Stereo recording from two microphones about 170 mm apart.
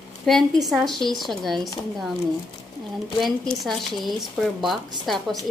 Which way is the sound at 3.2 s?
Centre (ahead or behind).